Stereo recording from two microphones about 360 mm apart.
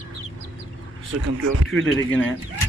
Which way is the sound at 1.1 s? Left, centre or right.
Right.